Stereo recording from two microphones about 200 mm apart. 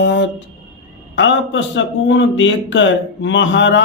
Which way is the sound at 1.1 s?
65° left (ahead or behind).